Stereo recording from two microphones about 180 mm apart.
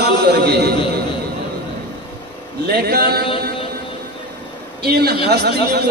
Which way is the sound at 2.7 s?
60° right (ahead or behind).